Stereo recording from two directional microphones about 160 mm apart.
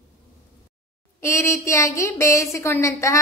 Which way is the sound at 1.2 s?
15° left (ahead or behind).